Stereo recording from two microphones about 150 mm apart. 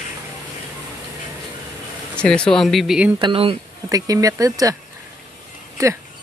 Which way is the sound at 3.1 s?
35° right (ahead or behind).